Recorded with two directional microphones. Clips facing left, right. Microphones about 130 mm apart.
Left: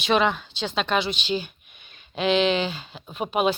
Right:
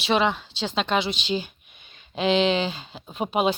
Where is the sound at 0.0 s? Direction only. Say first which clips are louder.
Left 1 dB; 25° right (ahead or behind).